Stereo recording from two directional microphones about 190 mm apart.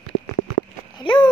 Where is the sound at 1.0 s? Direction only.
25° left (ahead or behind).